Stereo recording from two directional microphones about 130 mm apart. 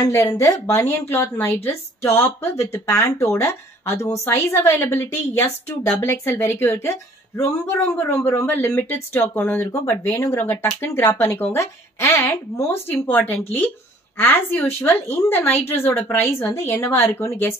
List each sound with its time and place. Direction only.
0.0 s a woman's voice: 25° left (ahead or behind)